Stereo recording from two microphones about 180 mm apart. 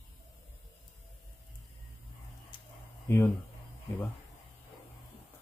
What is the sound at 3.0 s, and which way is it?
Speech, 15° left (ahead or behind).